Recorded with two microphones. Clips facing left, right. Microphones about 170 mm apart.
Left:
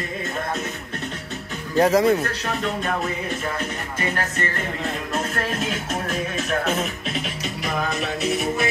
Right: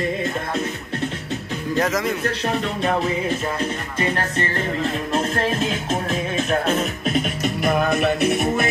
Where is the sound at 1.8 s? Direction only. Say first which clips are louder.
Left 6 dB; 30° left (ahead or behind).